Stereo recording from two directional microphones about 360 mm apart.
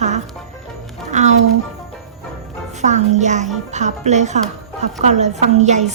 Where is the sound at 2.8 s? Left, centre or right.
Centre.